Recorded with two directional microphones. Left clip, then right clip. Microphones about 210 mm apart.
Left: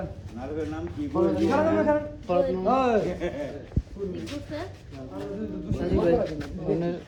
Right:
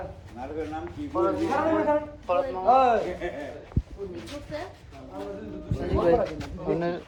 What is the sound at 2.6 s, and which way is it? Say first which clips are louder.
Speech: right 8 dB; 35° left (ahead or behind).